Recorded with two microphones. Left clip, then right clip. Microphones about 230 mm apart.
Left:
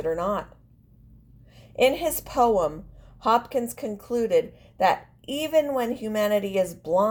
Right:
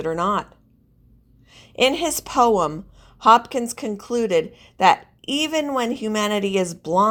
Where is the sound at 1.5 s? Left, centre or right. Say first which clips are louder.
Right 2 dB; right.